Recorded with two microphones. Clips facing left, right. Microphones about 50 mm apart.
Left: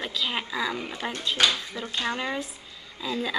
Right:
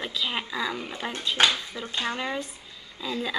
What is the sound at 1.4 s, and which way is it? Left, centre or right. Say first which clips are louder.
Speech: right 1 dB; right.